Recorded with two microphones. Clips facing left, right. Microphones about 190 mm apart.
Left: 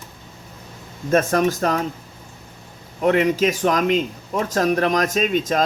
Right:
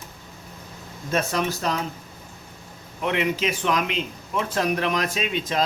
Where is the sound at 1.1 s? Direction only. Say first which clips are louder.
Left 7 dB; 50° left (ahead or behind).